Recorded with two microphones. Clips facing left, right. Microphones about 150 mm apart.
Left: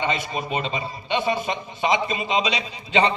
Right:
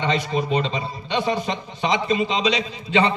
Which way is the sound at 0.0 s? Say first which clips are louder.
Right 3 dB; 15° left (ahead or behind).